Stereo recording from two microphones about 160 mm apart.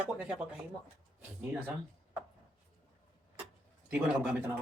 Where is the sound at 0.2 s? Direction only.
5° right (ahead or behind).